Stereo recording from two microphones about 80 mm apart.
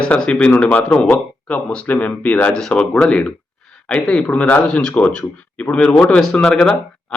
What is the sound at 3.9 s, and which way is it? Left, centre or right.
A man's voice, centre.